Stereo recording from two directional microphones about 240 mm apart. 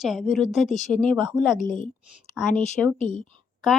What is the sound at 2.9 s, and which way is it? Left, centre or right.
Speech, left.